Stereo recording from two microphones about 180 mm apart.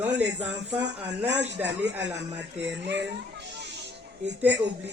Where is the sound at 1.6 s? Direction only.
75° right (ahead or behind).